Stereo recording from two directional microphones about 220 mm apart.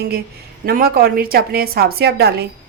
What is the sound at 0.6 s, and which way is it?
A woman's voice, 45° right (ahead or behind).